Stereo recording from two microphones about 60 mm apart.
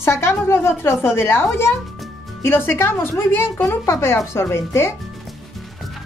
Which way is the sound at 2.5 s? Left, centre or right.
Left.